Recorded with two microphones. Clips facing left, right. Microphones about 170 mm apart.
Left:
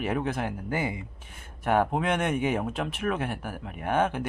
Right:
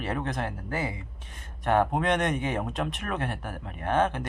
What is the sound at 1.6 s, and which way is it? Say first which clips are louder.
Speech: even; 5° left (ahead or behind).